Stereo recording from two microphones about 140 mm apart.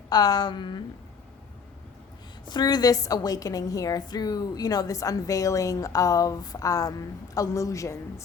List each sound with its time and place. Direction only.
0.1 s a woman's voice: 30° left (ahead or behind)
2.5 s a woman's voice: 30° left (ahead or behind)